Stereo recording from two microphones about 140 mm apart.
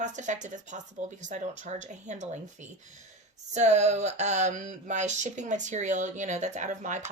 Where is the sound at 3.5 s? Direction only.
55° right (ahead or behind).